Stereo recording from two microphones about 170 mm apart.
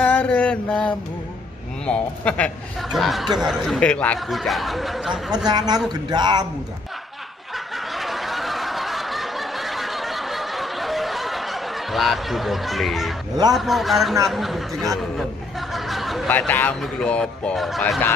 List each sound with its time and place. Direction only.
0.0 s mantra: 10° left (ahead or behind)
1.9 s a man's voice: 5° left (ahead or behind)
5.5 s speech: 25° right (ahead or behind)
7.5 s snicker: centre (ahead or behind)
13.6 s speech: centre (ahead or behind)
15.7 s a sound: centre (ahead or behind)
16.3 s a man's voice: 10° left (ahead or behind)